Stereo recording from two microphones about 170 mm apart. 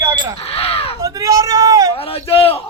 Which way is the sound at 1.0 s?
20° right (ahead or behind).